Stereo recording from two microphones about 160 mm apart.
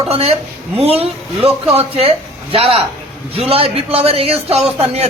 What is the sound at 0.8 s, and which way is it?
A man's voice, 40° right (ahead or behind).